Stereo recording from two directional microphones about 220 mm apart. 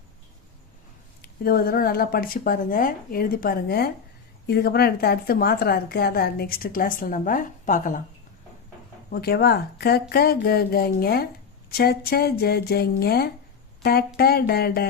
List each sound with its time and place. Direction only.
1.2 s a woman's voice: 45° left (ahead or behind)
9.0 s a woman's voice: 45° left (ahead or behind)